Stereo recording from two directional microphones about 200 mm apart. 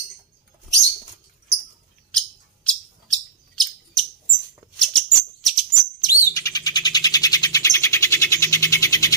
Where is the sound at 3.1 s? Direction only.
Centre (ahead or behind).